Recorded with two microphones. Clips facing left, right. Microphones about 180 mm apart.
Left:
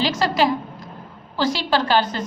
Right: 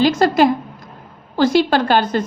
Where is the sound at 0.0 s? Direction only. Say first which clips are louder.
Right 6 dB; 50° right (ahead or behind).